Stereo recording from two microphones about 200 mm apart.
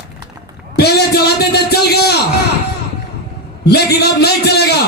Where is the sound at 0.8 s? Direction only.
55° left (ahead or behind).